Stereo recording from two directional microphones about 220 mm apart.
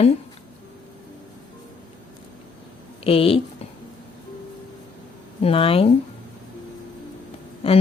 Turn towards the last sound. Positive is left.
turn(degrees=25)  # may be behind; listen again after turning